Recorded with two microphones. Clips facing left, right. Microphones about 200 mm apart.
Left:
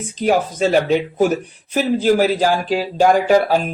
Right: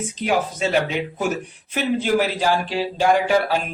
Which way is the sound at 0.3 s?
40° left (ahead or behind).